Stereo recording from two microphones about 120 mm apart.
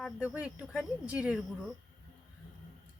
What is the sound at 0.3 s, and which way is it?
Speech, 15° right (ahead or behind).